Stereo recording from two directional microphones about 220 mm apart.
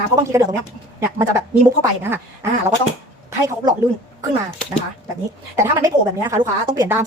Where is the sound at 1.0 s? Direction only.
15° right (ahead or behind).